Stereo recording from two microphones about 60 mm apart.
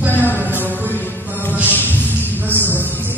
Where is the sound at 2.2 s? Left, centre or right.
Right.